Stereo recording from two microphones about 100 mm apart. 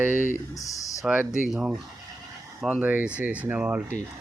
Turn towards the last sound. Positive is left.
turn(degrees=-15)  # may be behind; listen again after turning